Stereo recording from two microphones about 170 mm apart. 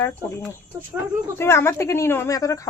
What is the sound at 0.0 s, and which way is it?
A woman's voice, 15° left (ahead or behind).